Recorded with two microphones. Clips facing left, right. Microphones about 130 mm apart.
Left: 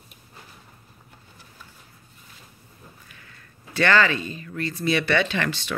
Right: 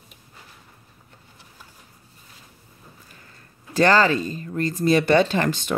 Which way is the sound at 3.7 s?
40° right (ahead or behind).